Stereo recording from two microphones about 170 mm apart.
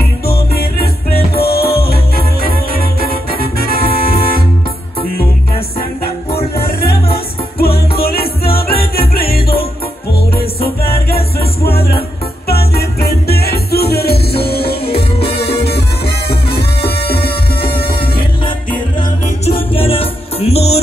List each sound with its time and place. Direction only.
0.3 s music: 65° left (ahead or behind)
6.6 s music: 65° left (ahead or behind)
12.7 s music: 70° left (ahead or behind)
15.2 s music: 35° left (ahead or behind)
16.4 s music: 65° left (ahead or behind)
18.1 s music: 30° left (ahead or behind)